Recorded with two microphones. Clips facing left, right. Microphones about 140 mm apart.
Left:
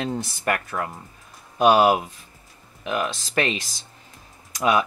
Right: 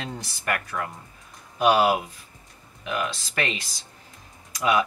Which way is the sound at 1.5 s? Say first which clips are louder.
Left 3 dB; 45° left (ahead or behind).